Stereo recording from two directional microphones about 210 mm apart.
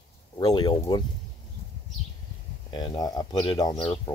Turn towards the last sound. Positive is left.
turn(degrees=25)  # may be behind; listen again after turning